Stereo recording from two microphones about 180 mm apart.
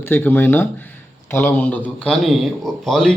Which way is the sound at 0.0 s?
10° left (ahead or behind).